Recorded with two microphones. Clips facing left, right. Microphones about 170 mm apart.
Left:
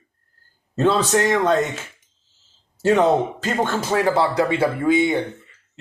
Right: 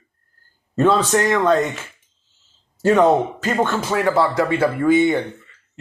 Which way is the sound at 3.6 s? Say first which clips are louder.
Even; 35° left (ahead or behind).